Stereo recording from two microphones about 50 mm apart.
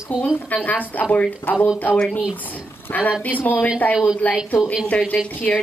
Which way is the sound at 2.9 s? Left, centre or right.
Left.